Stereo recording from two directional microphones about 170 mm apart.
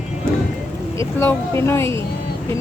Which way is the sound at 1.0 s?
15° left (ahead or behind).